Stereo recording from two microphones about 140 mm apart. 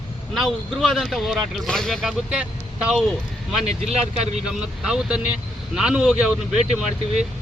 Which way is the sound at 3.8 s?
50° right (ahead or behind).